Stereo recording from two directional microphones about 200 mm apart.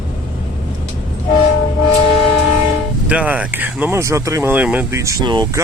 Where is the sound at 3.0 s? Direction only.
5° right (ahead or behind).